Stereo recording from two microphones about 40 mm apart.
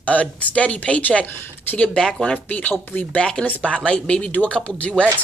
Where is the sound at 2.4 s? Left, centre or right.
Left.